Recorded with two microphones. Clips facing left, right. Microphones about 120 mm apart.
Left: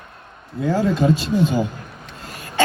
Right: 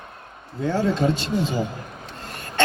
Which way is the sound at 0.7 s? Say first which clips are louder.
Left 3 dB; centre (ahead or behind).